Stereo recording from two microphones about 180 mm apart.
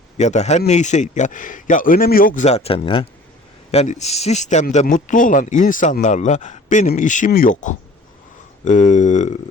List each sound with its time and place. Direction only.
0.2 s speech: 40° left (ahead or behind)